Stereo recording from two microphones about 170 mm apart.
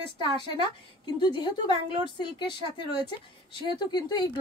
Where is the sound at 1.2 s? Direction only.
25° left (ahead or behind).